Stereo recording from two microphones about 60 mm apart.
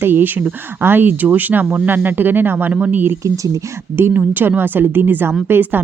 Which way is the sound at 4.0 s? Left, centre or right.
Right.